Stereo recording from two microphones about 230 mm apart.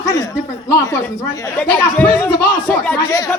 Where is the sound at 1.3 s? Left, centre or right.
Centre.